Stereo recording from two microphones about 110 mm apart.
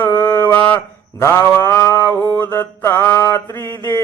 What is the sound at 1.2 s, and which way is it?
Mantra, 25° left (ahead or behind).